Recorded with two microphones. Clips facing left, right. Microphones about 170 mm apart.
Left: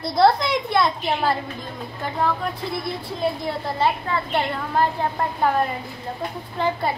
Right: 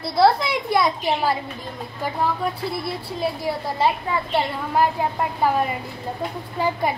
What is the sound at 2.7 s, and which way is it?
A woman's voice, 10° right (ahead or behind).